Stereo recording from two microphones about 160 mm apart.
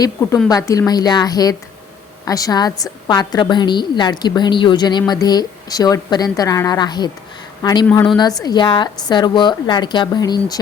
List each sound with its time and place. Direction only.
0.0 s a woman's voice: 20° left (ahead or behind)